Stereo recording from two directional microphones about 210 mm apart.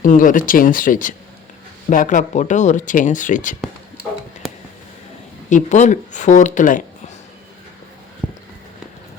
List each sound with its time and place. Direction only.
0.0 s speech: 40° left (ahead or behind)
5.5 s speech: 35° left (ahead or behind)
8.2 s walk: 5° right (ahead or behind)